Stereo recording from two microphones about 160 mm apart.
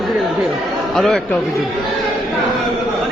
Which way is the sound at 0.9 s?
Centre (ahead or behind).